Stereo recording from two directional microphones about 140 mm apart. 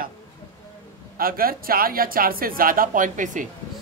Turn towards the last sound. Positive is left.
turn(degrees=-65)  # may be behind; listen again after turning